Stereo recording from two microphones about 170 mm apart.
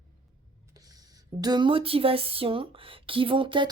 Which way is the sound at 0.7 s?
20° right (ahead or behind).